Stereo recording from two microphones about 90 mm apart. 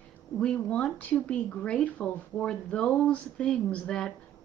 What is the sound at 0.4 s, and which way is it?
Speech, 10° left (ahead or behind).